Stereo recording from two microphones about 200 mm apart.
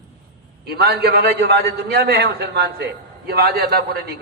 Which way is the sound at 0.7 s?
55° right (ahead or behind).